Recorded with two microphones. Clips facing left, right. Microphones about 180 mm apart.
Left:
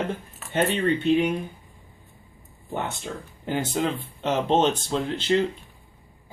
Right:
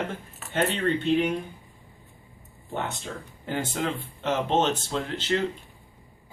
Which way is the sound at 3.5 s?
15° left (ahead or behind).